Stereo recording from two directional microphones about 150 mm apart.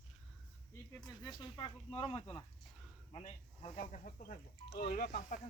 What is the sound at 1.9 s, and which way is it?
Speech, 40° left (ahead or behind).